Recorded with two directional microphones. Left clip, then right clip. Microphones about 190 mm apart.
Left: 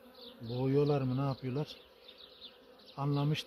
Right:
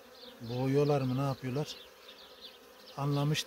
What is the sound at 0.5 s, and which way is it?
Speech, 10° right (ahead or behind).